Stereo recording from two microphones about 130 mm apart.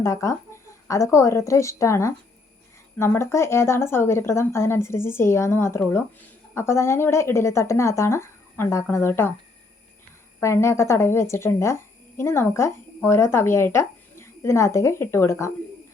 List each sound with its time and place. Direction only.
0.0 s speech: 25° left (ahead or behind)
10.4 s speech: 20° left (ahead or behind)